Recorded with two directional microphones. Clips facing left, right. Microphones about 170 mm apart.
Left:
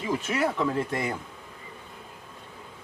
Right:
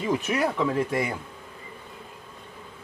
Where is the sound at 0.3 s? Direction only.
10° right (ahead or behind).